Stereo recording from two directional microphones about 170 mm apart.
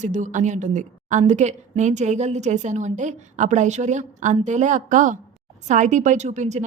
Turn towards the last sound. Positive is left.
turn(degrees=-45)  # may be behind; listen again after turning